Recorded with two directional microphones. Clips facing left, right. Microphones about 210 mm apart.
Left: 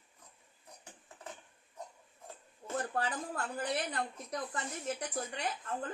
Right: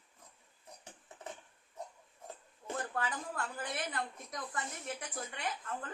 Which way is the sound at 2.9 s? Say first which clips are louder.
Left 2 dB; 35° left (ahead or behind).